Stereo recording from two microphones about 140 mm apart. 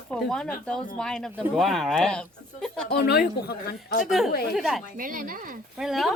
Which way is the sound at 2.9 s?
90° left.